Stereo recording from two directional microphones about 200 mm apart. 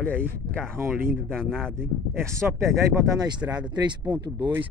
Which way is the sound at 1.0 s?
10° right (ahead or behind).